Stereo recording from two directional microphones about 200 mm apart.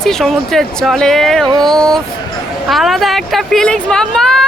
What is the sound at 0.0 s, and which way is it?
A woman's voice, 5° left (ahead or behind).